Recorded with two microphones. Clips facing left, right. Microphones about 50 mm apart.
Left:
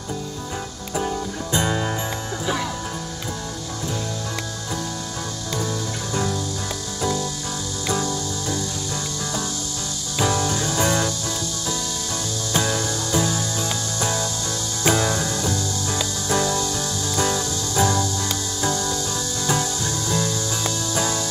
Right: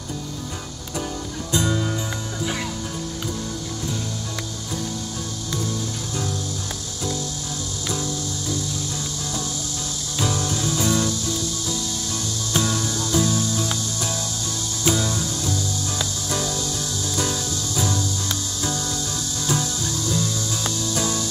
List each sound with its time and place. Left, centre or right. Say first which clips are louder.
1.5 s music: even; left
10.2 s music: left 3 dB; centre
10.8 s music: left 1 dB; left
12.5 s music: left 1 dB; left
14.8 s music: left 3 dB; left
16.3 s music: left 7 dB; left